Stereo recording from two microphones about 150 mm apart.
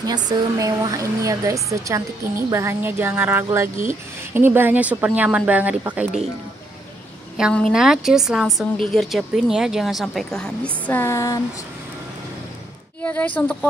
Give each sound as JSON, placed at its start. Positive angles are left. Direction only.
{"t": 0.0, "sound": "speech", "side_deg": -25}
{"t": 7.5, "sound": "speech", "side_deg": 0}
{"t": 13.0, "sound": "speech", "side_deg": 10}